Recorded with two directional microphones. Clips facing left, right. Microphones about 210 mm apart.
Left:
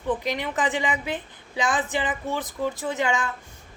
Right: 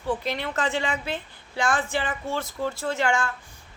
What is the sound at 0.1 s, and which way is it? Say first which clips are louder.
Speech: left 1 dB; 15° left (ahead or behind).